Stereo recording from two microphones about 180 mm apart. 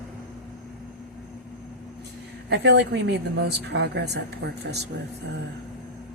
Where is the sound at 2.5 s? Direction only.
70° right (ahead or behind).